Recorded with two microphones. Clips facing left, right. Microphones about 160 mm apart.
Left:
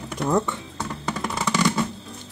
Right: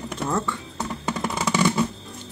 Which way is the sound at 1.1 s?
10° right (ahead or behind).